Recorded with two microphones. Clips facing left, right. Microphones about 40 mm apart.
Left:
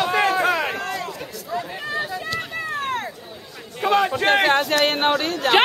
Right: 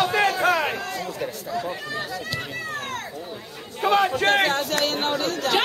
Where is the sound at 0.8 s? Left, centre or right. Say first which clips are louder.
Left 3 dB; left.